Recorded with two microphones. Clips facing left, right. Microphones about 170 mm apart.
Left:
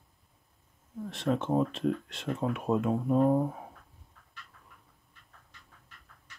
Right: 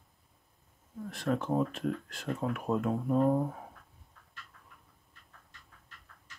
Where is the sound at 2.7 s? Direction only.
15° left (ahead or behind).